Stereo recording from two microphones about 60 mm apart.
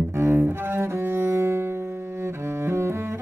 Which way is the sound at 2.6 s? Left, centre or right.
Right.